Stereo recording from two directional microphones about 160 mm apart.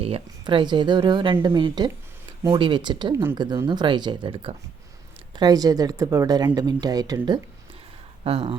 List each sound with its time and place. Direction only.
0.0 s speech: 35° right (ahead or behind)
8.2 s speech: 35° right (ahead or behind)